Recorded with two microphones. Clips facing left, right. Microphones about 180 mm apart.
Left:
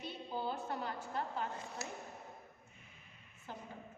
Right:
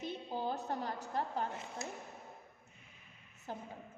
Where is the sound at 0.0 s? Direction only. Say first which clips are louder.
Right 2 dB; 45° right (ahead or behind).